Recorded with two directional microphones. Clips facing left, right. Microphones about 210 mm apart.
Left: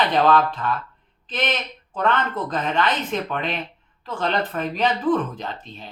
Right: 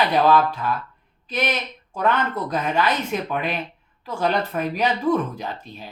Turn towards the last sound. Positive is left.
turn(degrees=-10)  # may be behind; listen again after turning